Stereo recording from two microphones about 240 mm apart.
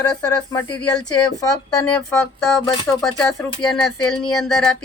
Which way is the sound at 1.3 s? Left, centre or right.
Centre.